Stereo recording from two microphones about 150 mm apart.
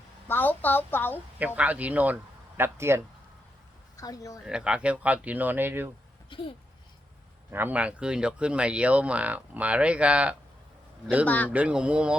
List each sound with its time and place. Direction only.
0.3 s a woman's voice: 10° left (ahead or behind)
1.5 s speech: 10° right (ahead or behind)
3.9 s speech: 25° left (ahead or behind)
4.4 s speech: 5° right (ahead or behind)
6.3 s speech: 35° left (ahead or behind)
7.5 s speech: 10° right (ahead or behind)
11.3 s a woman's voice: 10° left (ahead or behind)
11.5 s speech: 5° right (ahead or behind)